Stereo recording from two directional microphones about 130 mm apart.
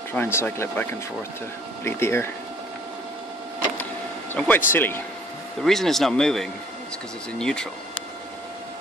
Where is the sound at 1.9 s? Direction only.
20° left (ahead or behind).